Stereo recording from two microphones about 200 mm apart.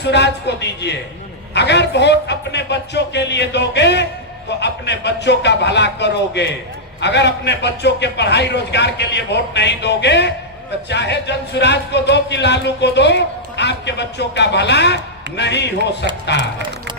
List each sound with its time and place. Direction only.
0.0 s speech: 60° left (ahead or behind)